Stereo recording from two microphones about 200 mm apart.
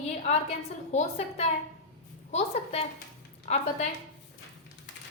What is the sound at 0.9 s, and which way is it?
A woman's voice, 30° left (ahead or behind).